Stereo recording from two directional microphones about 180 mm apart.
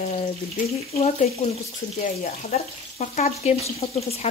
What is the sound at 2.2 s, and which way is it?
Speech, 45° left (ahead or behind).